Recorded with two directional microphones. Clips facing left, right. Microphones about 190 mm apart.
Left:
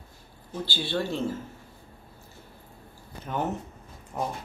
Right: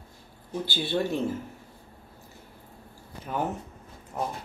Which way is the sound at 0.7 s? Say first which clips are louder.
Right 2 dB; 20° right (ahead or behind).